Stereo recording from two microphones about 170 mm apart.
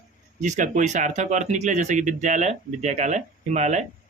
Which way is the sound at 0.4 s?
45° right (ahead or behind).